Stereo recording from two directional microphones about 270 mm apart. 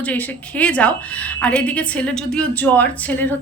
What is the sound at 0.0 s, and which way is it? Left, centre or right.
A woman's voice, centre.